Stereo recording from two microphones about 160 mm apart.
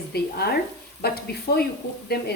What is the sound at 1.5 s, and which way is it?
Speech, 70° left (ahead or behind).